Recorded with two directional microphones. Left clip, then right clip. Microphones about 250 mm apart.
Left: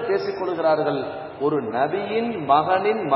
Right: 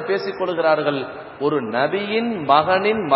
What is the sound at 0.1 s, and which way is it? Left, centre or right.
A man's voice, right.